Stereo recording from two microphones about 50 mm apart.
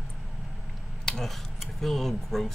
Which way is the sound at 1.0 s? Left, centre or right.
Centre.